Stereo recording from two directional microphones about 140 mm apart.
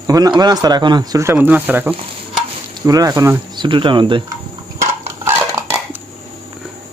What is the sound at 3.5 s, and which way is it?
Speech, 35° right (ahead or behind).